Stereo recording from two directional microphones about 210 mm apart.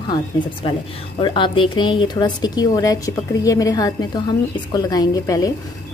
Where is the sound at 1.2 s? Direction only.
25° left (ahead or behind).